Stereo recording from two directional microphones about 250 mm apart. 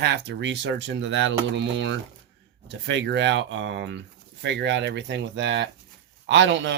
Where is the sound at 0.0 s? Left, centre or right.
Right.